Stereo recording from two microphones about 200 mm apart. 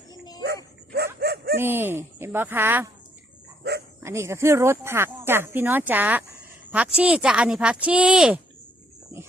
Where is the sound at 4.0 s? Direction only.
15° right (ahead or behind).